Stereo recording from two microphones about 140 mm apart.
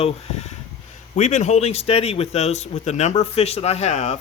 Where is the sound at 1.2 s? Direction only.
60° left (ahead or behind).